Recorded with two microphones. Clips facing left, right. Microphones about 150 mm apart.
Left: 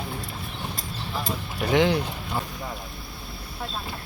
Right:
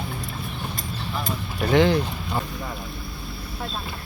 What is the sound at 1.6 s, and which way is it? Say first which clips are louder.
Speech: right 3 dB; 10° left (ahead or behind).